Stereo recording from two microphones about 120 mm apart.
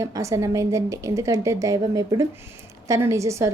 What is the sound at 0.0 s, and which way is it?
A woman's voice, 25° right (ahead or behind).